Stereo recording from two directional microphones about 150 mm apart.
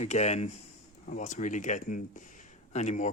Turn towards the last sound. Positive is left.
turn(degrees=55)  # may be behind; listen again after turning